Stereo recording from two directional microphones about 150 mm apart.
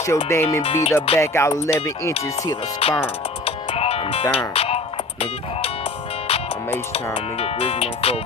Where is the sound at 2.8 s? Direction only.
40° left (ahead or behind).